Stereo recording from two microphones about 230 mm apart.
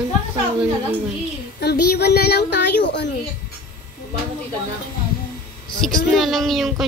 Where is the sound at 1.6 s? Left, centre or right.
Left.